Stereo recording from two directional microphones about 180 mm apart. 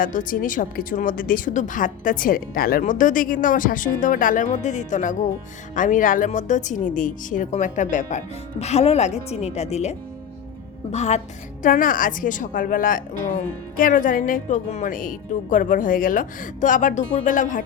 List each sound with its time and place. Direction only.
0.0 s a woman's voice: 50° left (ahead or behind)
10.9 s a woman's voice: 40° left (ahead or behind)